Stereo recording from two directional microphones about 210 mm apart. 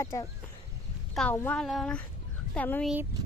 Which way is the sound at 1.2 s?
10° left (ahead or behind).